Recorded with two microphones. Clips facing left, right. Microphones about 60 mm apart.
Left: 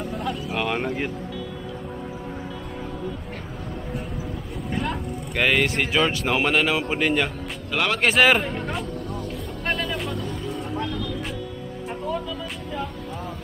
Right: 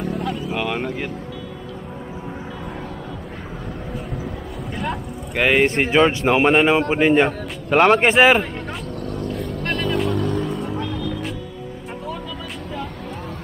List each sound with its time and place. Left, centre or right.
0.1 s vehicle: centre
4.7 s vehicle: centre
5.6 s speech: right
7.2 s a sound: right
8.0 s speech: centre
8.4 s speech: centre
9.0 s vehicle: right
9.6 s music: centre
10.1 s music: right
10.5 s music: centre